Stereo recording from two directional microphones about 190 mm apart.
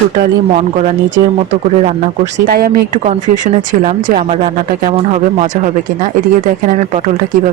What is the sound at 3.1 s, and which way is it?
Speech, 40° right (ahead or behind).